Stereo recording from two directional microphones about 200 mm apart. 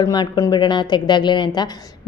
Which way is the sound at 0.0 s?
20° left (ahead or behind).